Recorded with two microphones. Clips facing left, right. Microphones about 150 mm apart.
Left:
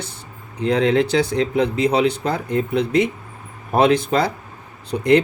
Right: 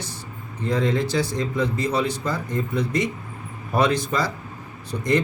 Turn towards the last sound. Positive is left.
turn(degrees=60)  # may be behind; listen again after turning